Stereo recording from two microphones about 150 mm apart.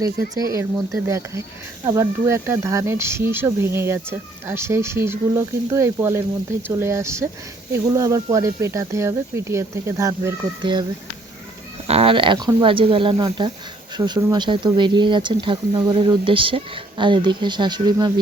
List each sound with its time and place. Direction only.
1.0 s speech: 20° right (ahead or behind)
10.6 s speech: 30° right (ahead or behind)
11.9 s speech: 40° right (ahead or behind)